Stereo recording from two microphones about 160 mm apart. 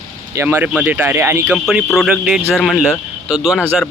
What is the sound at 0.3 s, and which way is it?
Speech, 10° right (ahead or behind).